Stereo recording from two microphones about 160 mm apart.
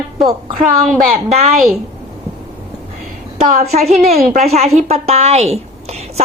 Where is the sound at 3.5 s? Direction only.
55° right (ahead or behind).